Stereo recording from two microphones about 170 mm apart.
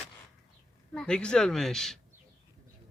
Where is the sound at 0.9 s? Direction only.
5° left (ahead or behind).